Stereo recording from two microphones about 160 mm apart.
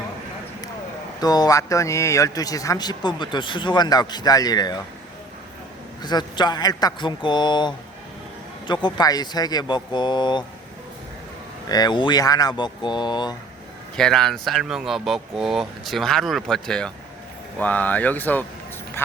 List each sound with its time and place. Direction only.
1.2 s speech: 25° left (ahead or behind)
6.0 s speech: 25° left (ahead or behind)
11.7 s speech: 25° left (ahead or behind)
13.9 s speech: 5° left (ahead or behind)